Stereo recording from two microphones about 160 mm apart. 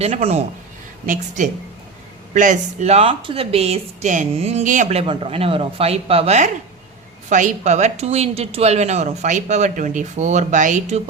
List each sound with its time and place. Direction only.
0.0 s speech: 40° right (ahead or behind)
1.0 s speech: 55° right (ahead or behind)